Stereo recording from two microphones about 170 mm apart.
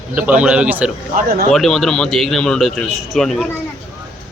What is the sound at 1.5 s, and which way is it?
Speech, centre (ahead or behind).